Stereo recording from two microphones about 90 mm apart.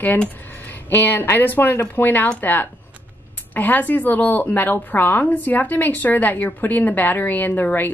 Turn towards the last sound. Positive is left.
turn(degrees=20)  # may be behind; listen again after turning